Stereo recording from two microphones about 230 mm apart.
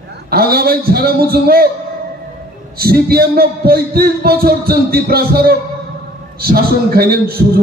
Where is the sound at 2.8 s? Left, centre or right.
Right.